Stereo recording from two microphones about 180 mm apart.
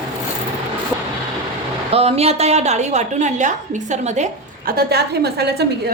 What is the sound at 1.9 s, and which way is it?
A woman's voice, 35° right (ahead or behind).